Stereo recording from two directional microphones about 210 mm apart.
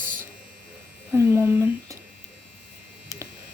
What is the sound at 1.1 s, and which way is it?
Speech, 10° right (ahead or behind).